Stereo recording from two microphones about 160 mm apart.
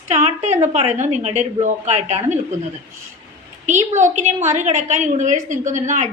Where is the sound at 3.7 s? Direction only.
45° right (ahead or behind).